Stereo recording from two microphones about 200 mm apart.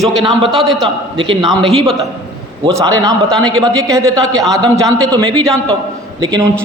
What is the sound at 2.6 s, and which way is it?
A man's voice, 20° right (ahead or behind).